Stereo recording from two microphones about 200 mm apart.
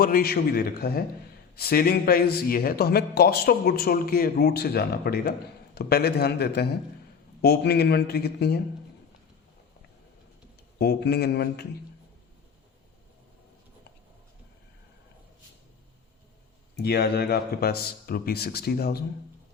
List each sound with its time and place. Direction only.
0.0 s a man's voice: 50° left (ahead or behind)
10.8 s a man's voice: 55° left (ahead or behind)
16.7 s a man's voice: 55° left (ahead or behind)